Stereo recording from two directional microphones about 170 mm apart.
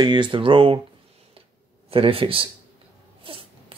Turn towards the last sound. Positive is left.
turn(degrees=-30)  # may be behind; listen again after turning